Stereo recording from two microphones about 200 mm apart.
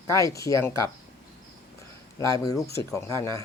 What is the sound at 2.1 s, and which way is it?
Speech, 15° left (ahead or behind).